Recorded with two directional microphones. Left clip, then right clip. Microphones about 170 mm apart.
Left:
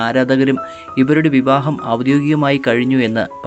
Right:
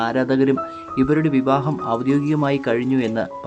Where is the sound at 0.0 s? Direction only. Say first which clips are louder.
Left 4 dB; 20° left (ahead or behind).